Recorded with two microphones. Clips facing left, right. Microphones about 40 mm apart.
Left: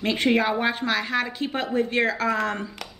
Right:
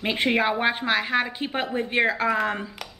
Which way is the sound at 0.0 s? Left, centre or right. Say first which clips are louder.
Left 1 dB; centre.